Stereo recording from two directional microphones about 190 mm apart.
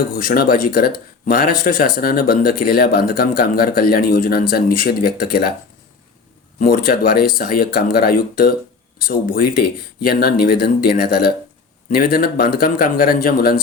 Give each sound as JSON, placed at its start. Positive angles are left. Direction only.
{"t": 0.1, "sound": "speech", "side_deg": 50}
{"t": 6.6, "sound": "speech", "side_deg": 50}